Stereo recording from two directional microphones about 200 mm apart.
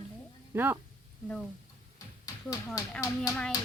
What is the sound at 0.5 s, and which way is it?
Speech, 10° right (ahead or behind).